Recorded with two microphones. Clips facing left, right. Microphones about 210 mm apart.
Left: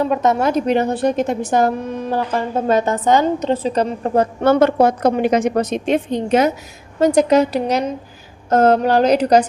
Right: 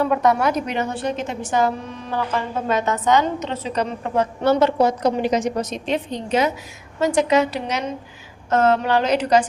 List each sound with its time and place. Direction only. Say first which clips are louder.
0.0 s a woman's voice: left 2 dB; 20° left (ahead or behind)
4.4 s a woman's voice: left 3 dB; 50° left (ahead or behind)
7.0 s a woman's voice: left 5 dB; 40° left (ahead or behind)